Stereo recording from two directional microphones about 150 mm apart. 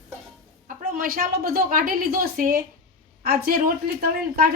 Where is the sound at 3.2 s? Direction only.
85° right.